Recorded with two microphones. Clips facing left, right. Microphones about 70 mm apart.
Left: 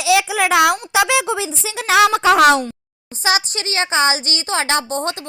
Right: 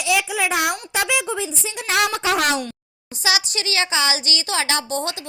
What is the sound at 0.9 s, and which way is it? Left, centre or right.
Speech, left.